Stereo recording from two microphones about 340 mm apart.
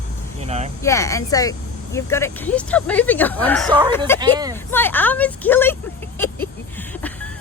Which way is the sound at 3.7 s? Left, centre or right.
Centre.